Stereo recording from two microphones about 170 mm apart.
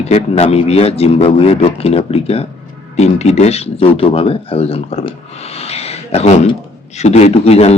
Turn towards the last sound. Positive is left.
turn(degrees=40)  # may be behind; listen again after turning